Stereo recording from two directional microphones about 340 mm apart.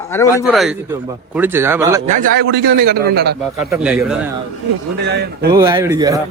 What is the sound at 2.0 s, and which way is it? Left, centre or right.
A man's voice, right.